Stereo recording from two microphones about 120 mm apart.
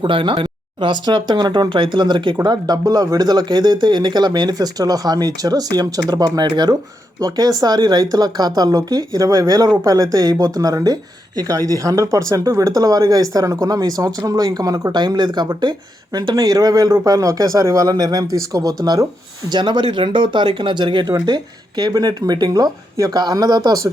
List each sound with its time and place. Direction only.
0.0 s speech: 45° right (ahead or behind)